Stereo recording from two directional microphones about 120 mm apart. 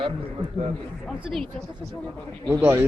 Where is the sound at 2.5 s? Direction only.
20° right (ahead or behind).